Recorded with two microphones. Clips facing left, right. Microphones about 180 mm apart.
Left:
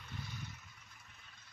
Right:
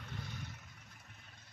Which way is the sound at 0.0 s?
60° right (ahead or behind).